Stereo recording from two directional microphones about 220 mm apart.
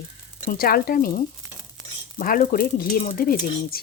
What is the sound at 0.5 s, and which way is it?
A woman's voice, 40° left (ahead or behind).